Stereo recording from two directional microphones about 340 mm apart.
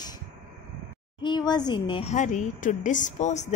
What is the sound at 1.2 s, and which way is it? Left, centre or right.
A woman's voice, centre.